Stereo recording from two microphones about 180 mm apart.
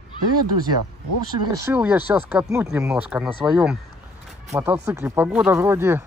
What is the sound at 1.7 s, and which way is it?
Speech, 10° right (ahead or behind).